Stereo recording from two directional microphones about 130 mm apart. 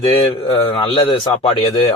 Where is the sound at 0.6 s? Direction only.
40° left (ahead or behind).